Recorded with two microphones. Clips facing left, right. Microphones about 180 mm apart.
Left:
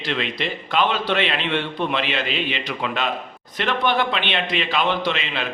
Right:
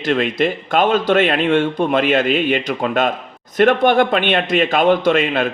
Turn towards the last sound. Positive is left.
turn(degrees=-50)  # may be behind; listen again after turning